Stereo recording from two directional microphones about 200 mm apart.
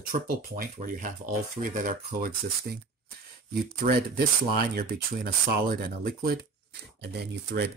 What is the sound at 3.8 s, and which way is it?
Speech, 50° right (ahead or behind).